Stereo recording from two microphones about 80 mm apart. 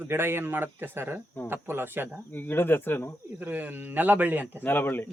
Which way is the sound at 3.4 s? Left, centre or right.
Right.